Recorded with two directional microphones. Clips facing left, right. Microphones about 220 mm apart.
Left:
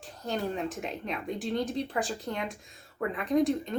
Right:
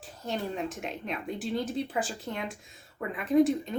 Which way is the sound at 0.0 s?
Centre (ahead or behind).